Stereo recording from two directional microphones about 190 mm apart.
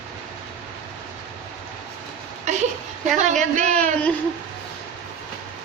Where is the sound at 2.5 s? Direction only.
40° right (ahead or behind).